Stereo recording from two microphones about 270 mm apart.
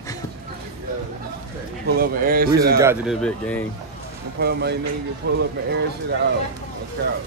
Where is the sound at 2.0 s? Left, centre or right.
Right.